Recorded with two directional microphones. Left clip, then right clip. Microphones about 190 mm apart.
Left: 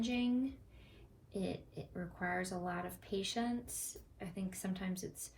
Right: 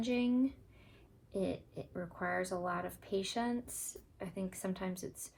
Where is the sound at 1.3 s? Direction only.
35° right (ahead or behind).